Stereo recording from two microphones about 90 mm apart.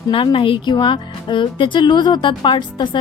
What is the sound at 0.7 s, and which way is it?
Speech, 60° left (ahead or behind).